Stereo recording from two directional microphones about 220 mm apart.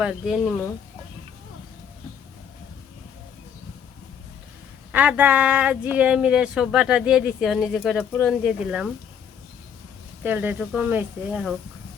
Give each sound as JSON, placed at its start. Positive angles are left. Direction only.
{"t": 0.0, "sound": "speech", "side_deg": 0}
{"t": 4.9, "sound": "speech", "side_deg": -5}
{"t": 10.2, "sound": "speech", "side_deg": -10}